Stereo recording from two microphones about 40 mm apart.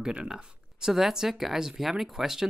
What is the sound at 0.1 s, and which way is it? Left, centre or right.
Speech, right.